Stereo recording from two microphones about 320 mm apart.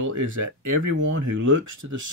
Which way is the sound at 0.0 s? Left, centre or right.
Right.